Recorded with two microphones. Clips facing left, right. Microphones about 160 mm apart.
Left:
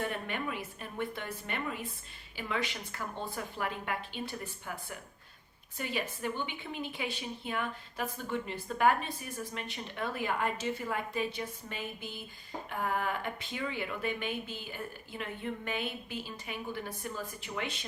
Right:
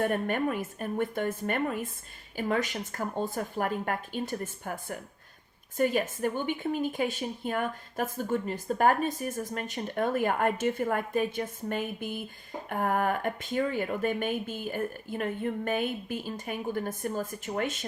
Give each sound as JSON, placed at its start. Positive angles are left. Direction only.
{"t": 0.0, "sound": "a woman's voice", "side_deg": -50}